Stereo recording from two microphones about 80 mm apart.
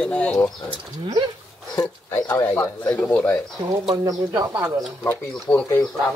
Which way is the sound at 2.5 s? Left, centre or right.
Centre.